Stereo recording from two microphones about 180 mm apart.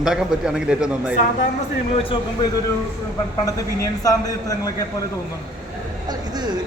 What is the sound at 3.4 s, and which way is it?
A man's voice, 20° left (ahead or behind).